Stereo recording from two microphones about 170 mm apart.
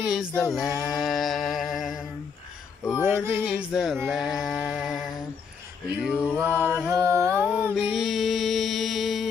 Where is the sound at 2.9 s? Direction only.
10° right (ahead or behind).